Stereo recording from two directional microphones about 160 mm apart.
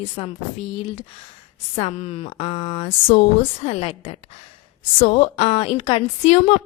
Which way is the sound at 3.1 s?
45° left (ahead or behind).